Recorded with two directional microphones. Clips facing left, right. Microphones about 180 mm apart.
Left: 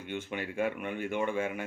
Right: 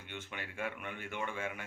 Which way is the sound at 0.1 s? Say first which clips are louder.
Left 10 dB; 15° left (ahead or behind).